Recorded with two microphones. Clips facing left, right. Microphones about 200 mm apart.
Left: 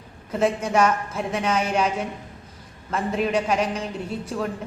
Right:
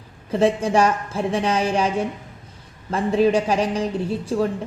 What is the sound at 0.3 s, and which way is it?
A woman's voice, 30° right (ahead or behind).